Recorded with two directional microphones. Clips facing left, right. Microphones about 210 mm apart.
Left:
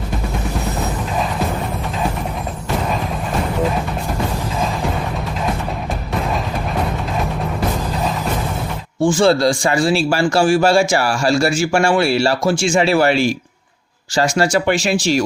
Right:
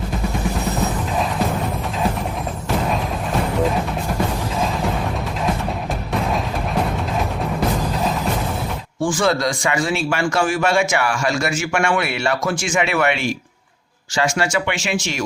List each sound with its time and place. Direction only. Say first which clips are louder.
9.0 s speech: left 5 dB; 25° left (ahead or behind)